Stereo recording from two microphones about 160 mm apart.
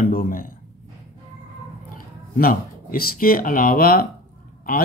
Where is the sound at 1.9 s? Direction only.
60° left (ahead or behind).